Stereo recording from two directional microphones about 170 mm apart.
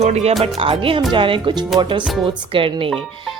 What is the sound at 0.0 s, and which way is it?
Speech, 40° right (ahead or behind).